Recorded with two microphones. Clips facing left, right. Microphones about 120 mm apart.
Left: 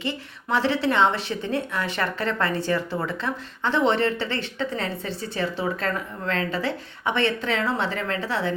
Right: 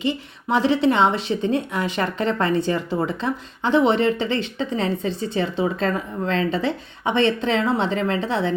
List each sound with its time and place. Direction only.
0.0 s a woman's voice: 15° right (ahead or behind)